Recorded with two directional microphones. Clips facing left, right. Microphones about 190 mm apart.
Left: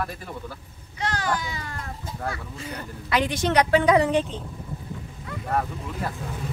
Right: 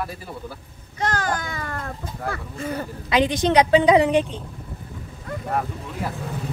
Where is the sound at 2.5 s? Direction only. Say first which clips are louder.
Right 7 dB; 50° right (ahead or behind).